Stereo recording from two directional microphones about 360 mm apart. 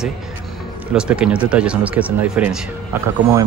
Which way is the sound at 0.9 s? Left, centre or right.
Centre.